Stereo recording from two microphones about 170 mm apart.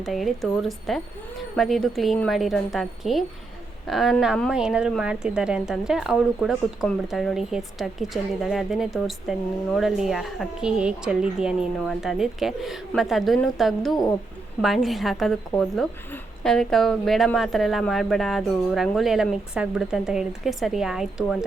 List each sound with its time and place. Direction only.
0.0 s speech: centre (ahead or behind)